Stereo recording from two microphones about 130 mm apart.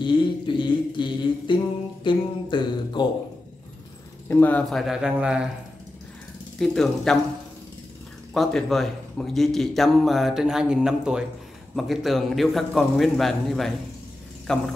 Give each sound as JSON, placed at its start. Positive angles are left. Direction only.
{"t": 0.0, "sound": "a sound", "side_deg": 40}
{"t": 4.3, "sound": "a man's voice", "side_deg": 15}
{"t": 6.6, "sound": "a man's voice", "side_deg": 5}
{"t": 8.3, "sound": "a man's voice", "side_deg": 0}